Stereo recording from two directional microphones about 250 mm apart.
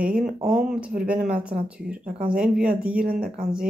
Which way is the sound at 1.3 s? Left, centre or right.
Centre.